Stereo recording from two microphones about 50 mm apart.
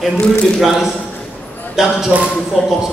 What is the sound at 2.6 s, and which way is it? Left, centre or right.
Speech, centre.